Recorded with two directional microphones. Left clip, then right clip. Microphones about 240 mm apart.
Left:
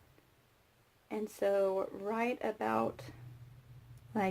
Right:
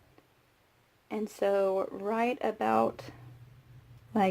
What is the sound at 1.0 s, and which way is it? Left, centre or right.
Speech, right.